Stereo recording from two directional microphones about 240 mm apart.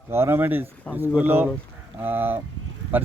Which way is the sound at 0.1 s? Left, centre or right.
Centre.